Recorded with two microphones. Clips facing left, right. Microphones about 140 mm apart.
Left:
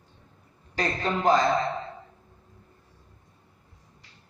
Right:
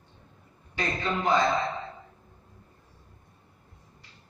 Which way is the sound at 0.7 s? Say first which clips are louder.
Left 2 dB; 40° left (ahead or behind).